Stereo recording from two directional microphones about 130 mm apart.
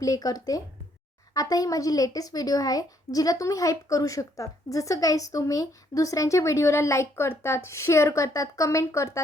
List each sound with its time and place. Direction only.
0.0 s a woman's voice: 30° left (ahead or behind)